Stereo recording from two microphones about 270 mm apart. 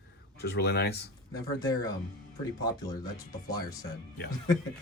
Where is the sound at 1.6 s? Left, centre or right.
Centre.